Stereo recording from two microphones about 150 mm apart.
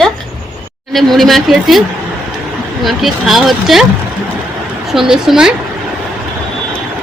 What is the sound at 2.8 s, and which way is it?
Speech, centre (ahead or behind).